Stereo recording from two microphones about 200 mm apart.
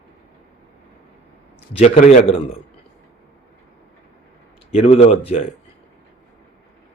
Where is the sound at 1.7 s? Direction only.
35° left (ahead or behind).